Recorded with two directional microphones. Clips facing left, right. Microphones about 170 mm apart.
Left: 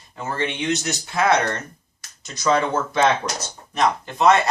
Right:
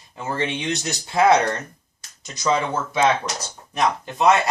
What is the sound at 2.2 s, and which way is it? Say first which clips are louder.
Speech: left 2 dB; 15° right (ahead or behind).